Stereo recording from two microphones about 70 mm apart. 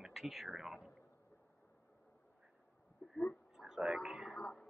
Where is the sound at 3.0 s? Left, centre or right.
Centre.